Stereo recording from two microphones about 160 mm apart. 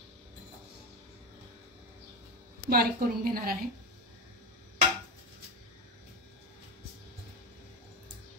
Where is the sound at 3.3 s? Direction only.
65° right (ahead or behind).